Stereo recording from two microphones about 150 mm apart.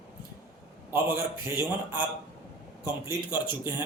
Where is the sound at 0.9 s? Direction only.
15° right (ahead or behind).